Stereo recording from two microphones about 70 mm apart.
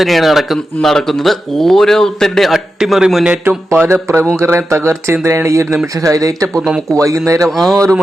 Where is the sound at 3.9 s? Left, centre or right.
Right.